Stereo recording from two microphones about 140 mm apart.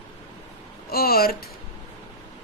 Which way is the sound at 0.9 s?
90° left.